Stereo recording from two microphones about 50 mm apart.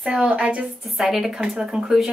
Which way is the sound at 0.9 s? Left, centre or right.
Centre.